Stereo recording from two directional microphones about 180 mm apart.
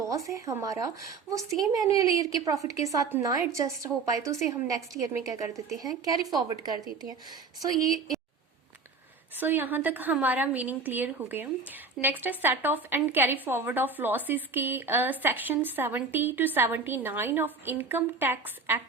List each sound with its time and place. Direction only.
0.3 s a woman's voice: 15° right (ahead or behind)
9.4 s a woman's voice: 10° right (ahead or behind)